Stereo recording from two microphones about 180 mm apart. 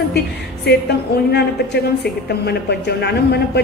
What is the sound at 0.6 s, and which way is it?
A woman's voice, 65° left (ahead or behind).